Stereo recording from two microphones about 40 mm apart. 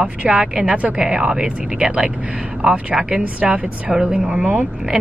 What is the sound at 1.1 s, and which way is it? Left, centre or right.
Speech, right.